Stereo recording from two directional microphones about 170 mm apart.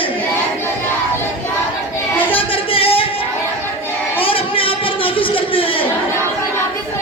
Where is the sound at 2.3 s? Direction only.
35° left (ahead or behind).